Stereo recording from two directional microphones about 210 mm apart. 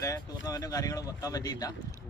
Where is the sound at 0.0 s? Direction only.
15° left (ahead or behind).